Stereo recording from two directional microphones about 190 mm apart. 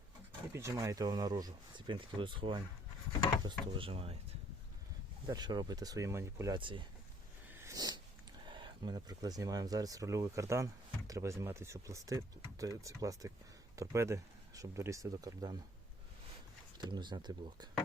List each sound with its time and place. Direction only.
0.5 s speech: 15° right (ahead or behind)
5.2 s speech: 20° right (ahead or behind)
7.5 s a sound: 15° right (ahead or behind)
8.4 s speech: 25° right (ahead or behind)
16.7 s speech: 25° right (ahead or behind)